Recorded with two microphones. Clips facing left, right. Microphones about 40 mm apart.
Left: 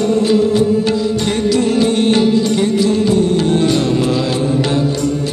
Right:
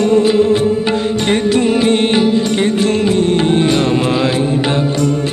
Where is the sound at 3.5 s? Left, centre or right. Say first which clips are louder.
Right 1 dB; right.